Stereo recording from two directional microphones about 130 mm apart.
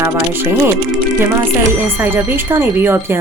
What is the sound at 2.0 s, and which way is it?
Speech, 15° right (ahead or behind).